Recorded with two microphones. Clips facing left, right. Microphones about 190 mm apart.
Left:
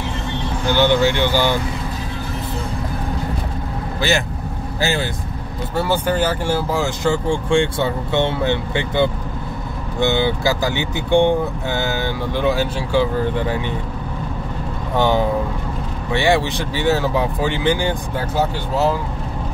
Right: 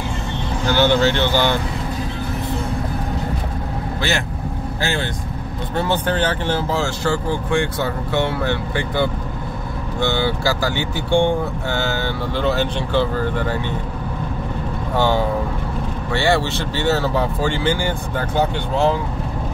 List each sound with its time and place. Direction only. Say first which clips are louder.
0.7 s speech: even; 15° left (ahead or behind)
4.7 s speech: left 3 dB; 5° left (ahead or behind)
15.0 s speech: left 1 dB; 15° left (ahead or behind)
18.3 s speech: right 1 dB; 5° left (ahead or behind)